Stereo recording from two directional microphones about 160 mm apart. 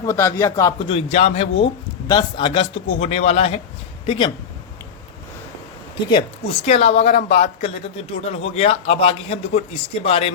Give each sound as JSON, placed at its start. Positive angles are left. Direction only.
{"t": 0.0, "sound": "speech", "side_deg": 15}
{"t": 0.8, "sound": "a woman's voice", "side_deg": 40}
{"t": 2.0, "sound": "a woman's voice", "side_deg": 30}
{"t": 6.1, "sound": "a woman's voice", "side_deg": 35}